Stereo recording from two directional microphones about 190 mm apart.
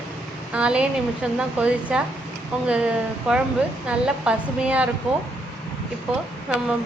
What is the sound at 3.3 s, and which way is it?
Speech, 5° right (ahead or behind).